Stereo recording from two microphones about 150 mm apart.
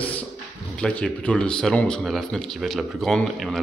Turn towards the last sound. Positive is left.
turn(degrees=0)  # may be behind; listen again after turning